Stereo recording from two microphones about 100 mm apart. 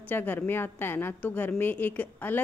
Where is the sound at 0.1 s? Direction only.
20° left (ahead or behind).